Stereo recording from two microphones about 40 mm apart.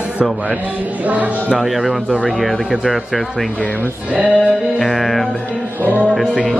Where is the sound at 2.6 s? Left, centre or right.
Centre.